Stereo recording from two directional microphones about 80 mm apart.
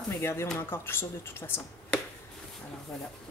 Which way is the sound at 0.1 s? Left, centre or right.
Left.